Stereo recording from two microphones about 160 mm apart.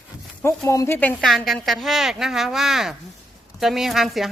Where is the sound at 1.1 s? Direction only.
Centre (ahead or behind).